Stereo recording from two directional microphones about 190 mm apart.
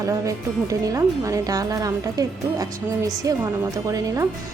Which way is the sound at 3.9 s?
15° right (ahead or behind).